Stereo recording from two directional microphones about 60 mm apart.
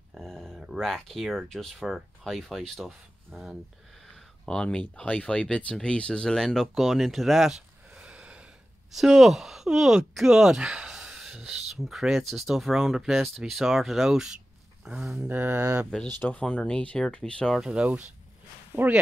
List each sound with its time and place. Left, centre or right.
0.1 s speech: centre
3.3 s speech: centre
4.0 s speech: centre
8.0 s a sound: centre
8.9 s speech: centre
15.2 s mantra: right
16.3 s speech: centre
17.6 s speech: centre
18.7 s mantra: right